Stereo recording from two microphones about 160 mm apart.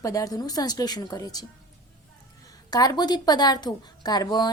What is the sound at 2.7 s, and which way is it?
A woman's voice, 25° left (ahead or behind).